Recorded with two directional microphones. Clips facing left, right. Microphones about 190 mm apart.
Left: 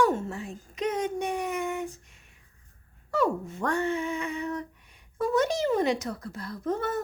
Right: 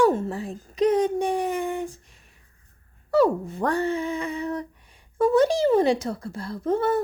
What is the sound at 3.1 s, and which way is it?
A woman's voice, 35° right (ahead or behind).